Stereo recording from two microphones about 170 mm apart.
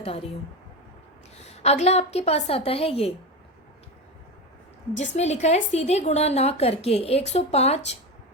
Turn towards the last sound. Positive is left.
turn(degrees=40)  # may be behind; listen again after turning